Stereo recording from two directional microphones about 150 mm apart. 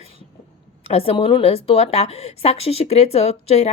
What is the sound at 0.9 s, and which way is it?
Speech, 40° left (ahead or behind).